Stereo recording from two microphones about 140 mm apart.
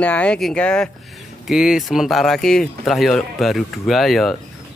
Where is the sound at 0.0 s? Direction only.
10° left (ahead or behind).